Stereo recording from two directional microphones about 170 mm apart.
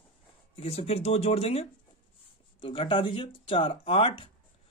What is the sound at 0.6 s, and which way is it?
A man's voice, 35° left (ahead or behind).